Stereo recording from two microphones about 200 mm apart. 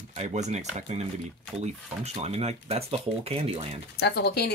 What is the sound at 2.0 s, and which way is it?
Speech, 30° right (ahead or behind).